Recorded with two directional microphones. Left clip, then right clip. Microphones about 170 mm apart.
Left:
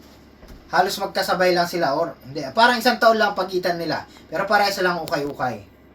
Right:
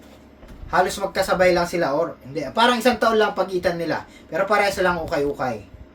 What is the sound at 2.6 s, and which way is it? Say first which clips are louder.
Speech: left 2 dB; 20° right (ahead or behind).